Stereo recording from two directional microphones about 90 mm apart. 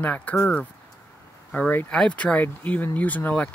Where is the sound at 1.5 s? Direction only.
20° left (ahead or behind).